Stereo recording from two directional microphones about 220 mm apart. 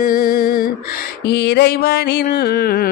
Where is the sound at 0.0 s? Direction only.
40° left (ahead or behind).